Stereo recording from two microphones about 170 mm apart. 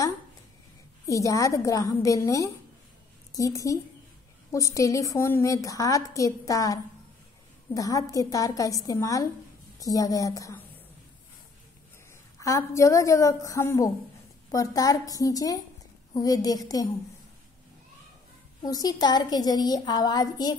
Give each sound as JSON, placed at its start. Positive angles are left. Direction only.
{"t": 1.0, "sound": "a woman's voice", "side_deg": 20}
{"t": 12.4, "sound": "a woman's voice", "side_deg": 15}
{"t": 18.6, "sound": "a woman's voice", "side_deg": 20}